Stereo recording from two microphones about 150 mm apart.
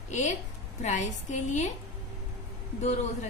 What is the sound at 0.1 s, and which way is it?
A woman's voice, 55° left (ahead or behind).